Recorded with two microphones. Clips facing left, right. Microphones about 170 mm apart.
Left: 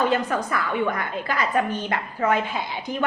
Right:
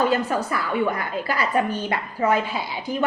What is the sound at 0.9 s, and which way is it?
Speech, 30° right (ahead or behind).